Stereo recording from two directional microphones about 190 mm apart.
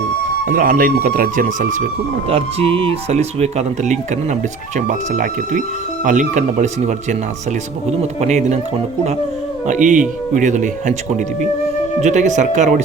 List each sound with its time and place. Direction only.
0.4 s speech: 45° right (ahead or behind)
2.3 s speech: 30° right (ahead or behind)
9.6 s speech: 40° right (ahead or behind)
12.0 s speech: 40° right (ahead or behind)